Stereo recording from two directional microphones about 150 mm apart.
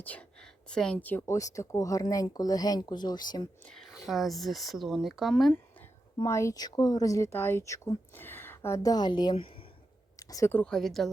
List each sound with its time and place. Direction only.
0.0 s speech: 10° left (ahead or behind); by 3.4 s 30° left (ahead or behind)
3.7 s speech: centre (ahead or behind)
6.2 s speech: 20° left (ahead or behind); by 9.6 s 35° left (ahead or behind)
10.2 s speech: 25° left (ahead or behind)
10.6 s speech: 5° left (ahead or behind)